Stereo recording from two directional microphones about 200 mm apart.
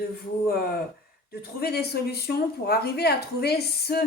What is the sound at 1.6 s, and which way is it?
Speech, 50° left (ahead or behind).